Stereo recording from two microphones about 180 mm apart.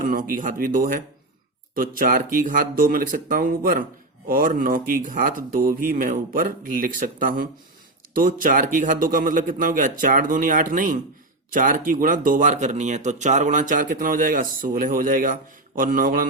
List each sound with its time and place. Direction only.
0.0 s speech: 50° right (ahead or behind)